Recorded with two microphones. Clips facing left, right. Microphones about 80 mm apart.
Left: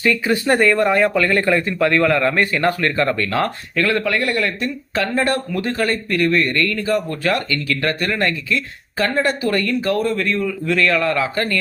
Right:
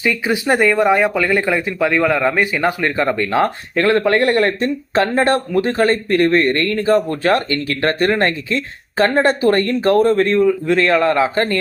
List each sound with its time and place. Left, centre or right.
0.0 s speech: centre